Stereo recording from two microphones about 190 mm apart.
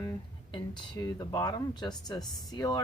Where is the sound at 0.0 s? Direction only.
20° left (ahead or behind).